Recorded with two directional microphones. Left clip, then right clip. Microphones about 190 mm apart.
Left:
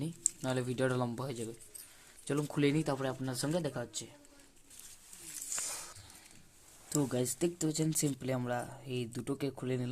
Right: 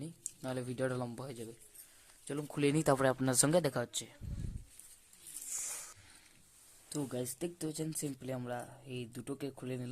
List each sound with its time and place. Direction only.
0.4 s speech: 5° right (ahead or behind)
2.6 s speech: 15° right (ahead or behind)
2.8 s speech: 30° right (ahead or behind)
5.6 s a sound: centre (ahead or behind)
6.9 s speech: centre (ahead or behind)